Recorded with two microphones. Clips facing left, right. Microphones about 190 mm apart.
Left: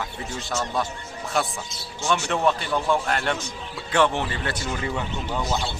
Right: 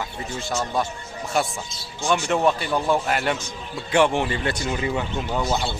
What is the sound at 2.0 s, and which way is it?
A man's voice, 15° right (ahead or behind).